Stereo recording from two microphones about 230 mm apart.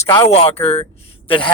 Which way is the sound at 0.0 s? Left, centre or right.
Centre.